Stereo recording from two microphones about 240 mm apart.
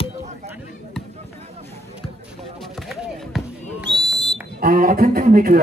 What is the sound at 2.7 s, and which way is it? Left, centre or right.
Basketball bounce, centre.